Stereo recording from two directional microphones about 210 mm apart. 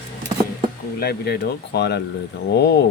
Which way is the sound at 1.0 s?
50° left (ahead or behind).